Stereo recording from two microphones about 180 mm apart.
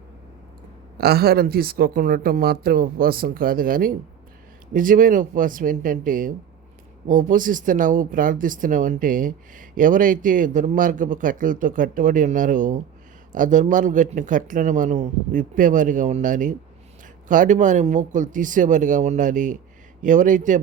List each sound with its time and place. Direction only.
0.9 s speech: 60° right (ahead or behind)